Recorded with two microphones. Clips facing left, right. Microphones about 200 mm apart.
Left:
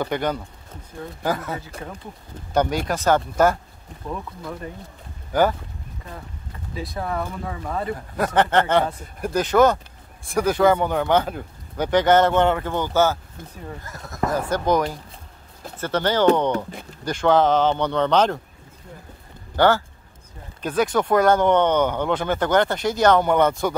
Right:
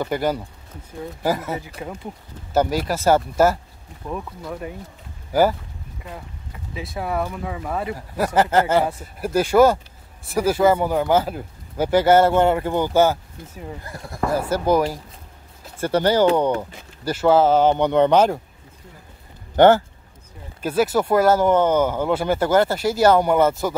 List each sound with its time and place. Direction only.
0.0 s speech: 5° right (ahead or behind)
6.7 s speech: 5° right (ahead or behind)
13.8 s speech: 30° right (ahead or behind)
14.2 s speech: 10° right (ahead or behind)
19.5 s speech: 20° right (ahead or behind)
20.6 s speech: 5° right (ahead or behind)